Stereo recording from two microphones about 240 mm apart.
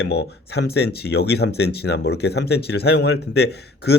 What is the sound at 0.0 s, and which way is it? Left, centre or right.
A man's voice, left.